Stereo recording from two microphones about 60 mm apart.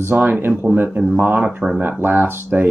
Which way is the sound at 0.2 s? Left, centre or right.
Right.